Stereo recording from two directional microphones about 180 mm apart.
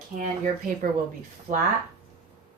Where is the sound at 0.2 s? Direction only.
45° right (ahead or behind).